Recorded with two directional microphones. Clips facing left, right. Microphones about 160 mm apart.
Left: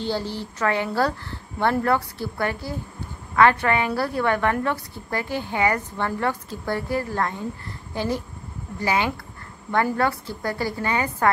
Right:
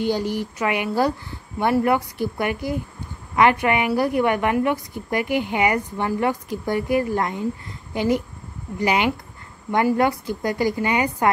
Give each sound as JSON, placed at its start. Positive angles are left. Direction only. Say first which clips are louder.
{"t": 0.0, "sound": "a woman's voice", "louder": "right 4 dB", "side_deg": -15}